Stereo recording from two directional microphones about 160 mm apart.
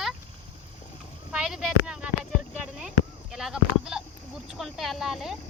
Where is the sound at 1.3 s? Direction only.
5° right (ahead or behind).